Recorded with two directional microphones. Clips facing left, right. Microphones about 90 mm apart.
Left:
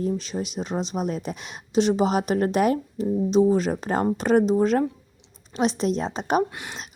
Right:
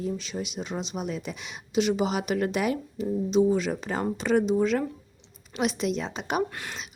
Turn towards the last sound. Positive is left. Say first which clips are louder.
# left 1 dB
turn(degrees=20)  # may be behind; listen again after turning